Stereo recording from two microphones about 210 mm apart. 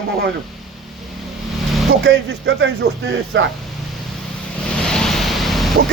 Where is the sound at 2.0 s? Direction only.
60° right (ahead or behind).